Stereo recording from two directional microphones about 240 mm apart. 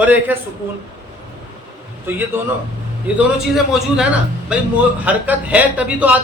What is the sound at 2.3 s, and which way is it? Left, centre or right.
Speech, centre.